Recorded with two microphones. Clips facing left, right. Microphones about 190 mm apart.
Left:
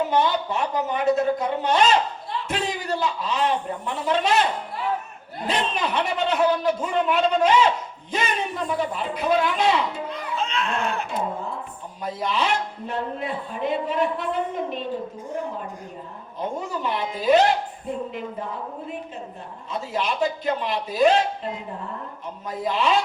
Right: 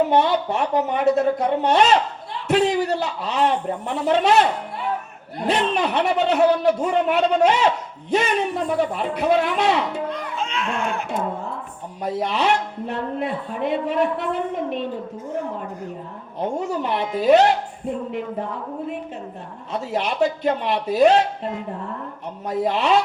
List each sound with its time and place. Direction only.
0.1 s speech: 60° right (ahead or behind)
5.5 s speech: 65° right (ahead or behind)
10.3 s a sound: 10° right (ahead or behind)
12.0 s speech: 65° right (ahead or behind)
16.6 s speech: 65° right (ahead or behind)
19.7 s speech: 65° right (ahead or behind)